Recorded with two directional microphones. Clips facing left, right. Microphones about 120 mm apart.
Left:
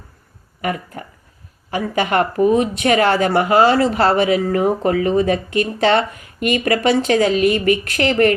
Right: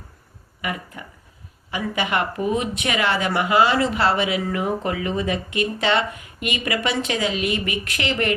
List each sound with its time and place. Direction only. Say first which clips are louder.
0.6 s speech: left 6 dB; 45° left (ahead or behind)